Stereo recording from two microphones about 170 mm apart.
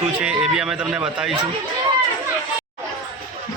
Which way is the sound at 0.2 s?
5° right (ahead or behind).